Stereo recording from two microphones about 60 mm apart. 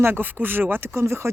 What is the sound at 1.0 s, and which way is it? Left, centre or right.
Speech, right.